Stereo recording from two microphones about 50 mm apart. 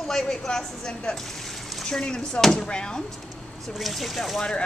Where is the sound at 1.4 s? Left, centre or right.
Centre.